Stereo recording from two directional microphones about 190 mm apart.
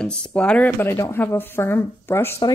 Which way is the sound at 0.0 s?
5° left (ahead or behind).